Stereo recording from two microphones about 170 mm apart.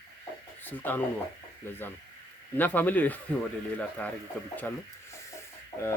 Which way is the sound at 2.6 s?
10° left (ahead or behind).